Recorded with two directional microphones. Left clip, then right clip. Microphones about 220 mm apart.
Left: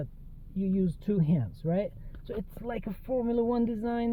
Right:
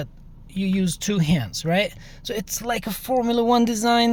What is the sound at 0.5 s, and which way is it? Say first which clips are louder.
Speech: right 6 dB; 10° right (ahead or behind).